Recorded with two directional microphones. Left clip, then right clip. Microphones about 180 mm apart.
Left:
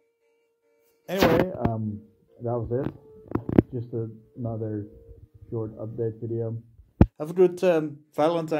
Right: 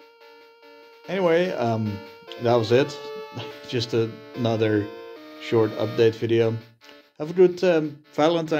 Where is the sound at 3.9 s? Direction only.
40° right (ahead or behind).